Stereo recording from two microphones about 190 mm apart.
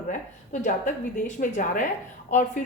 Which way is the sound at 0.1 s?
40° left (ahead or behind).